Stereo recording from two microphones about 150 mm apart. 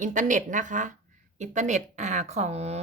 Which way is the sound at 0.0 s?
60° right (ahead or behind).